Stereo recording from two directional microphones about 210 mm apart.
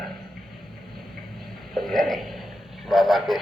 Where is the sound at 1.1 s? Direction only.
Centre (ahead or behind).